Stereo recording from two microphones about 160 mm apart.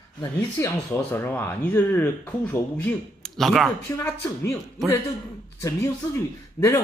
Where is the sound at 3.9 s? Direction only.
15° left (ahead or behind).